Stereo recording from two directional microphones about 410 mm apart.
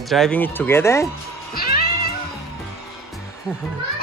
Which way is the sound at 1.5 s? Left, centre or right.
Left.